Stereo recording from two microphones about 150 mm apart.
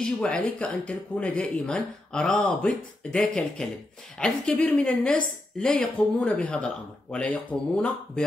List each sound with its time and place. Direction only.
0.0 s a woman's voice: 5° left (ahead or behind)